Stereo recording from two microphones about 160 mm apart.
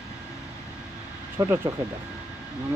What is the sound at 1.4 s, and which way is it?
Speech, 20° right (ahead or behind).